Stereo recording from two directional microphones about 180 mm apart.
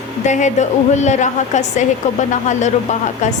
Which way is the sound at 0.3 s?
40° left (ahead or behind).